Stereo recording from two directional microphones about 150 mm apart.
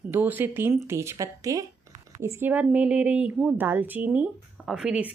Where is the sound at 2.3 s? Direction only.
10° right (ahead or behind).